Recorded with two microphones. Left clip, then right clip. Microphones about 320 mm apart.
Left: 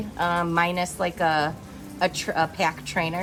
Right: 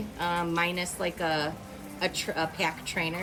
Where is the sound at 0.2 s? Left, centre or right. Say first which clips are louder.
Left 5 dB; centre.